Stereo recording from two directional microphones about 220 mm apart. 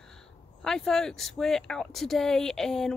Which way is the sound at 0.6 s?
Centre (ahead or behind).